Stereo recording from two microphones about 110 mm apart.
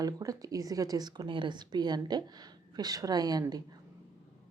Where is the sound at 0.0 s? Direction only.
30° right (ahead or behind).